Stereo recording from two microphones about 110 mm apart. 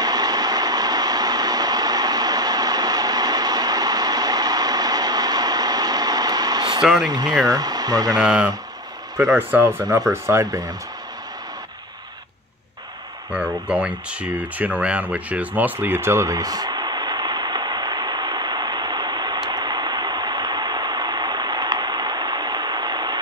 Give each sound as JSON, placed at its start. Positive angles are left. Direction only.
{"t": 0.0, "sound": "vehicle", "side_deg": -35}
{"t": 6.8, "sound": "speech", "side_deg": -5}
{"t": 7.1, "sound": "speech", "side_deg": -35}
{"t": 8.2, "sound": "speech", "side_deg": -5}
{"t": 9.5, "sound": "speech", "side_deg": -20}
{"t": 13.3, "sound": "a sound", "side_deg": -10}